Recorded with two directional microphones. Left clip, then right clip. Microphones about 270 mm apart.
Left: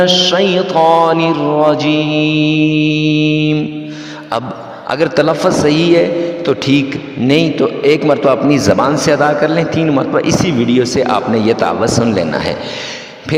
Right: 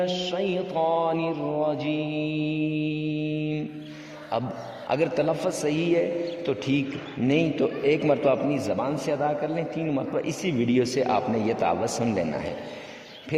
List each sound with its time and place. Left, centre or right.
0.0 s a man's voice: left
4.9 s a man's voice: left